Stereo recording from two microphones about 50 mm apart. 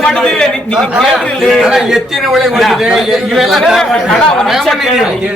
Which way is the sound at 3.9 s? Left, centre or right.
Centre.